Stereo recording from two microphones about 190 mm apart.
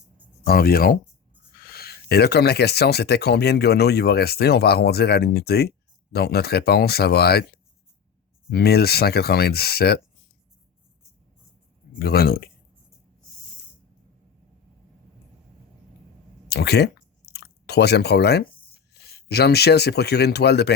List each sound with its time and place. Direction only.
0.4 s speech: 50° left (ahead or behind)
8.4 s speech: 55° left (ahead or behind)
11.9 s speech: 55° left (ahead or behind)
16.5 s chewing: 60° left (ahead or behind)
19.0 s speech: 55° left (ahead or behind)